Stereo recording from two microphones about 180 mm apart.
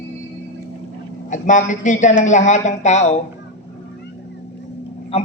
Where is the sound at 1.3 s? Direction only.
45° left (ahead or behind).